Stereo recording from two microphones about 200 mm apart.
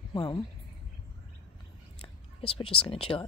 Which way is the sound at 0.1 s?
20° left (ahead or behind).